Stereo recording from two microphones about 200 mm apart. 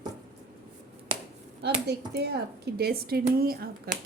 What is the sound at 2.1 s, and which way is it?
A woman's voice, 55° right (ahead or behind).